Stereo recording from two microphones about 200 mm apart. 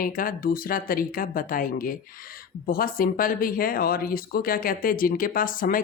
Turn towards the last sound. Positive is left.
turn(degrees=45)  # may be behind; listen again after turning